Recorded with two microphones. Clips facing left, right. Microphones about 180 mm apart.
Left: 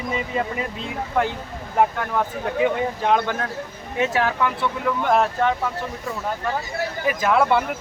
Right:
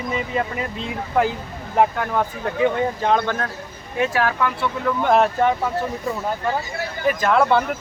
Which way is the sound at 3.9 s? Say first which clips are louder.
Right 1 dB; 20° left (ahead or behind).